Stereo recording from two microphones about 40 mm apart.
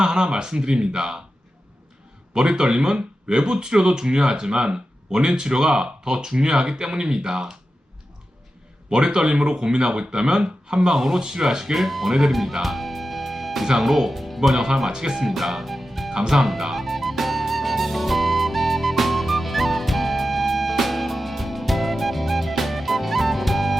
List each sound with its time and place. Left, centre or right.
0.0 s speech: centre
2.3 s speech: right
8.9 s speech: right
10.8 s speech: centre
12.6 s music: centre
13.7 s speech: centre
13.9 s speech: centre
14.8 s speech: centre
15.3 s music: centre
16.1 s music: centre